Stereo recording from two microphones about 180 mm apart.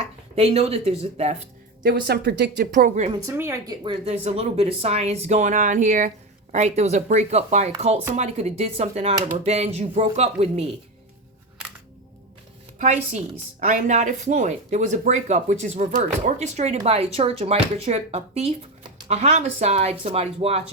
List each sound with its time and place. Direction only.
0.3 s speech: 35° right (ahead or behind)
1.8 s speech: 60° right (ahead or behind)
2.7 s a woman's voice: 45° right (ahead or behind)
3.2 s speech: 15° right (ahead or behind)
3.8 s speech: 35° right (ahead or behind)
12.8 s speech: 40° right (ahead or behind)